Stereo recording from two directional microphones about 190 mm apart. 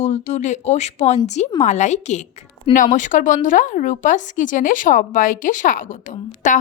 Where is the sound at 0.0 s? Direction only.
40° left (ahead or behind).